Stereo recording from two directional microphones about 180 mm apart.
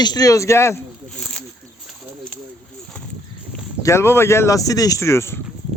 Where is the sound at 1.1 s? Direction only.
5° left (ahead or behind).